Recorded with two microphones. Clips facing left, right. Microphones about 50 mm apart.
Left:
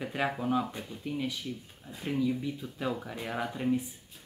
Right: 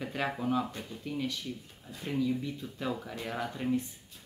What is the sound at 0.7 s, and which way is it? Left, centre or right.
Speech, centre.